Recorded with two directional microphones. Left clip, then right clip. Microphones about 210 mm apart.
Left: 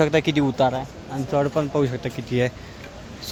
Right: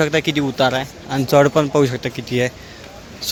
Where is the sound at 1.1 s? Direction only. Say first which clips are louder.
Right 9 dB; 30° right (ahead or behind).